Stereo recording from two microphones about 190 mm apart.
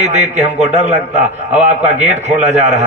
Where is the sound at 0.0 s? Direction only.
35° right (ahead or behind).